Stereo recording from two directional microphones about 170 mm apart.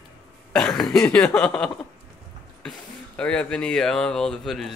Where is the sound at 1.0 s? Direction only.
15° left (ahead or behind).